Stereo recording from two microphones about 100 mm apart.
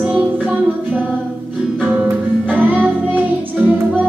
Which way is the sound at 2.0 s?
15° right (ahead or behind).